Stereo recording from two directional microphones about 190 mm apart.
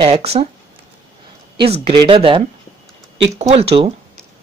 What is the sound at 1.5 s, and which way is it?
Speech, 30° right (ahead or behind).